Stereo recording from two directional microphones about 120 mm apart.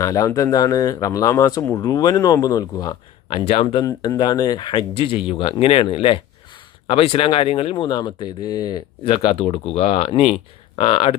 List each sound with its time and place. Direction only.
0.0 s speech: 30° left (ahead or behind)
3.4 s speech: 55° left (ahead or behind)
3.8 s speech: 30° left (ahead or behind); by 11.1 s 50° left (ahead or behind)